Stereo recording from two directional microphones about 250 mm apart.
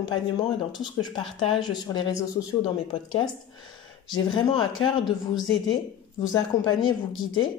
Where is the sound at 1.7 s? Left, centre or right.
Centre.